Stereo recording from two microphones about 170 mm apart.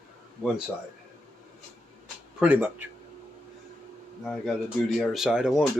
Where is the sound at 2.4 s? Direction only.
10° right (ahead or behind).